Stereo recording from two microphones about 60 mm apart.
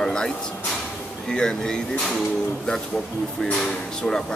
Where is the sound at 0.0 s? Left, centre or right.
Centre.